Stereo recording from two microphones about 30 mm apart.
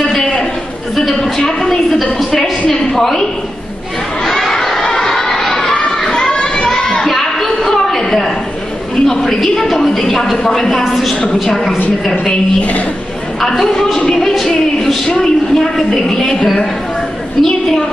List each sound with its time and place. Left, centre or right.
0.0 s a sound: centre
1.4 s a woman's voice: centre
2.7 s a woman's voice: centre
4.2 s crowd: centre
4.7 s a sound: centre
5.9 s children playing: centre
7.1 s a sound: centre
9.4 s speech: centre
13.5 s speech: centre
14.4 s a sound: centre
15.1 s speech: centre
17.5 s speech: centre